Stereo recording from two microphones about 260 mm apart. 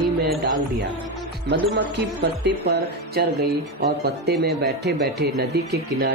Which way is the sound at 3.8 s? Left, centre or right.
Right.